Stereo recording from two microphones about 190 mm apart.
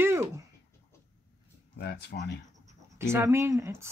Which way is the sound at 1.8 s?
60° left (ahead or behind).